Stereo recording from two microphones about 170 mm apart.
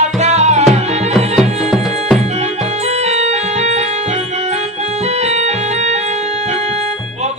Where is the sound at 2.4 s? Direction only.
40° right (ahead or behind).